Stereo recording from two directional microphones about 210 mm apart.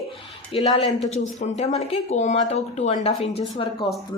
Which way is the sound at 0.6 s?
30° left (ahead or behind).